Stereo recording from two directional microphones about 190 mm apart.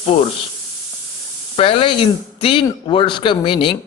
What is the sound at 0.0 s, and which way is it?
Speech, 35° left (ahead or behind).